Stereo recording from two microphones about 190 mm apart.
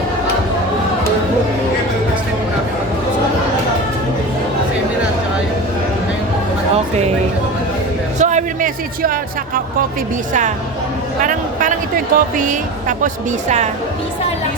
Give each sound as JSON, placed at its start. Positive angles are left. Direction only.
{"t": 8.2, "sound": "a man's voice", "side_deg": -40}
{"t": 11.2, "sound": "speech", "side_deg": -45}